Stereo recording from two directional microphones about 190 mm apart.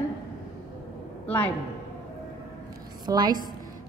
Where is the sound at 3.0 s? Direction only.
20° right (ahead or behind).